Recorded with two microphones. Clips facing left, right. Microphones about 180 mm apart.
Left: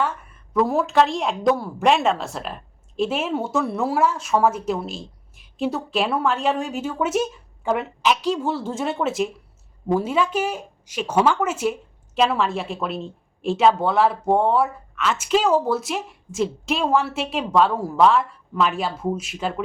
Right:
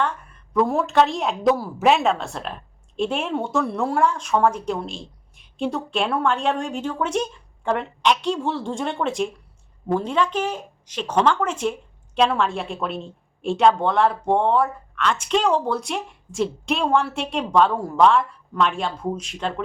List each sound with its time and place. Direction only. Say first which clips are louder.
0.5 s speech: even; centre (ahead or behind)